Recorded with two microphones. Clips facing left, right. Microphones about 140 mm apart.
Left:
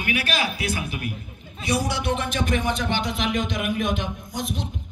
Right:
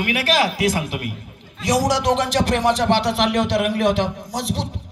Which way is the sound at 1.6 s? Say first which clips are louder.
Right 6 dB; 90° right.